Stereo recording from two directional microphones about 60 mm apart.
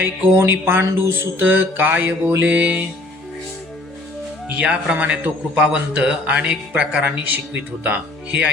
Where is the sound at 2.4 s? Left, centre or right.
Right.